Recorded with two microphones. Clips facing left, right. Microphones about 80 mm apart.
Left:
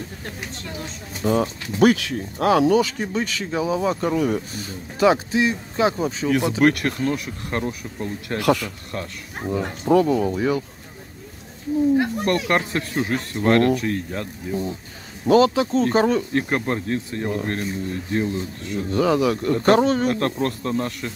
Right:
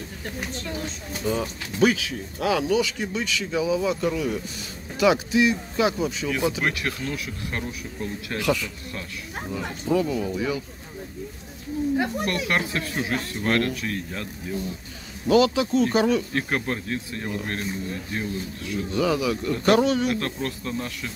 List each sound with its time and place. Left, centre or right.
1.2 s speech: left
2.3 s speech: left
6.6 s speech: left
8.4 s speech: left
12.3 s speech: left
18.6 s speech: left